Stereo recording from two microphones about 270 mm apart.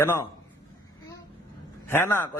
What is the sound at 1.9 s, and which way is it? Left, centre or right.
Speech, centre.